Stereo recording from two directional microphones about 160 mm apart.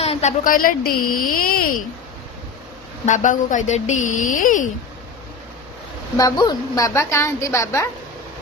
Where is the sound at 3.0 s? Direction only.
50° left (ahead or behind).